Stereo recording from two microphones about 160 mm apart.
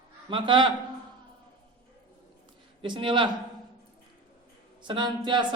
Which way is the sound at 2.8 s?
30° right (ahead or behind).